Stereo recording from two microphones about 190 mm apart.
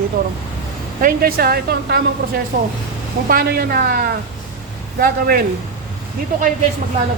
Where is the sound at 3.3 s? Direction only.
55° right (ahead or behind).